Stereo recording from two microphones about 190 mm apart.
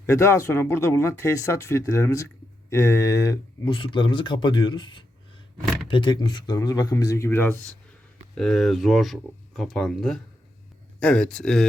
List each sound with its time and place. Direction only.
0.0 s speech: 15° left (ahead or behind)